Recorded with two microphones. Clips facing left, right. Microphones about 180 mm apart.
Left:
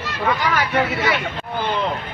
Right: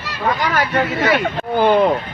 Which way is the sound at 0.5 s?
50° right (ahead or behind).